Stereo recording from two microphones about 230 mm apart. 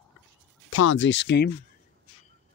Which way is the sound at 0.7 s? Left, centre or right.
Left.